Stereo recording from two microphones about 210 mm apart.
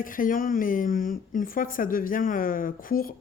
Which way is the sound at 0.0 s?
40° left (ahead or behind).